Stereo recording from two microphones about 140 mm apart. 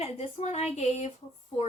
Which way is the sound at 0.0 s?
50° left (ahead or behind).